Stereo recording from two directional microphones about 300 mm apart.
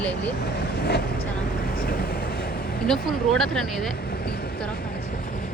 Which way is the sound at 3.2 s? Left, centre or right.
Centre.